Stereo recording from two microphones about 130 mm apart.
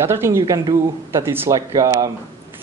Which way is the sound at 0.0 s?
20° right (ahead or behind).